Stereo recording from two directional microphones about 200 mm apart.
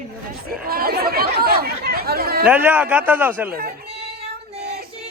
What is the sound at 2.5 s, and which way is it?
A man's voice, 10° right (ahead or behind).